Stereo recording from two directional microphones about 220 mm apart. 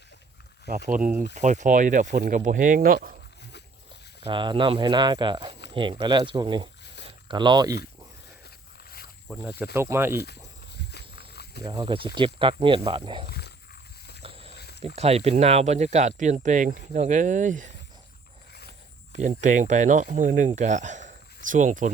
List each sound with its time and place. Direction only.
1.4 s speech: 35° right (ahead or behind)
4.2 s speech: 20° right (ahead or behind)
9.7 s speech: 10° right (ahead or behind)
11.6 s speech: 20° right (ahead or behind)
13.2 s wild animals: 45° left (ahead or behind)
14.2 s walk: 25° right (ahead or behind)
14.5 s a sound: 45° left (ahead or behind)
14.8 s speech: 30° right (ahead or behind)
19.1 s speech: 35° right (ahead or behind)